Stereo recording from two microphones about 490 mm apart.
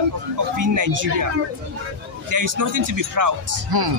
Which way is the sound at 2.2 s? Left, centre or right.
Right.